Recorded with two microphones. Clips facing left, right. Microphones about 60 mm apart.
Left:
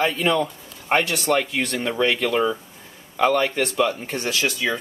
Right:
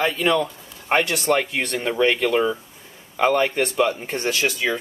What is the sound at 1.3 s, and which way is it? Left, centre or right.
Speech, centre.